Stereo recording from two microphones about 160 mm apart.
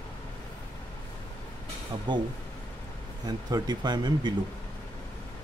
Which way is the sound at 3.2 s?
25° right (ahead or behind).